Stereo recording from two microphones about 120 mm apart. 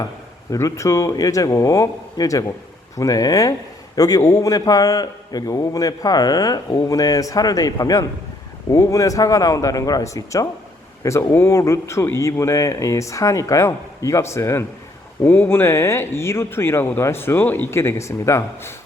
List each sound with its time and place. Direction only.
0.5 s a man's voice: 25° left (ahead or behind)